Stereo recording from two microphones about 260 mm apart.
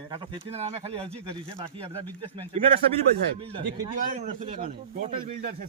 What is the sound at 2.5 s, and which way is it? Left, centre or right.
Speech, right.